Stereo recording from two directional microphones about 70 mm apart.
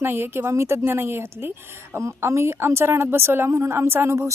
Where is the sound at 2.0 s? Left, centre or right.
Right.